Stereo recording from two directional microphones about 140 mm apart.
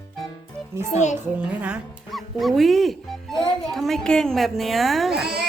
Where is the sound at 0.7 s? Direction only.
20° right (ahead or behind).